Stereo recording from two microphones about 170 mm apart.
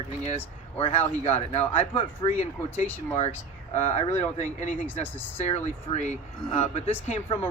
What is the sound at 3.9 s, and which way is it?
Speech, 40° left (ahead or behind).